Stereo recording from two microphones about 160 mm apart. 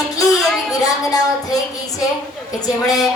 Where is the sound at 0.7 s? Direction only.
20° left (ahead or behind).